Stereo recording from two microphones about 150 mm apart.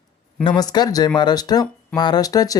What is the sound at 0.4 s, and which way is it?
Speech, 30° left (ahead or behind).